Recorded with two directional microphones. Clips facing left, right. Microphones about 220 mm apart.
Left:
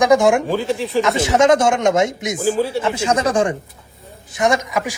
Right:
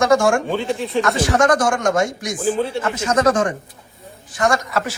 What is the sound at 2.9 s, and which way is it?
Speech, 30° left (ahead or behind).